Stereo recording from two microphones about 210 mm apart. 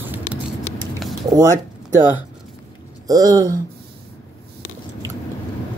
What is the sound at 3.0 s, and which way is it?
Speech, 15° right (ahead or behind).